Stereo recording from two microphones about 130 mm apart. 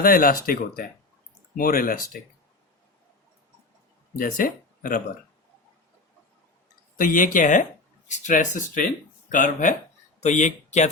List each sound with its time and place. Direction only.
0.0 s speech: 90° left
1.5 s speech: 90° left
4.2 s speech: 90° left
6.9 s speech: 90° left
8.0 s speech: 70° left (ahead or behind)
10.2 s speech: 65° left (ahead or behind)